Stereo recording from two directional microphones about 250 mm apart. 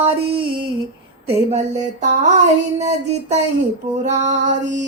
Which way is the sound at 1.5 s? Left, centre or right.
Right.